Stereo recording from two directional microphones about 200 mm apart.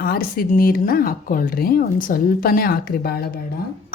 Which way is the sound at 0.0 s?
45° left (ahead or behind).